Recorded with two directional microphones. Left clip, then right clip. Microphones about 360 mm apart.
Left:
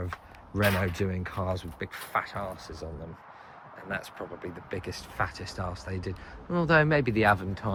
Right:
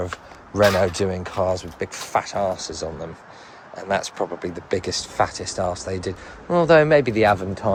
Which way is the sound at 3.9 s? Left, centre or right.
Centre.